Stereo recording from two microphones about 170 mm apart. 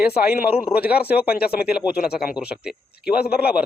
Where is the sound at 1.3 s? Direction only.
65° left (ahead or behind).